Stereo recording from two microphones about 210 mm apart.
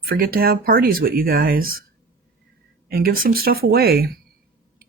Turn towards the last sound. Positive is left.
turn(degrees=-45)  # may be behind; listen again after turning